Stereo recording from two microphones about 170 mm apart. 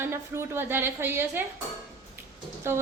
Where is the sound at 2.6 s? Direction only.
15° right (ahead or behind).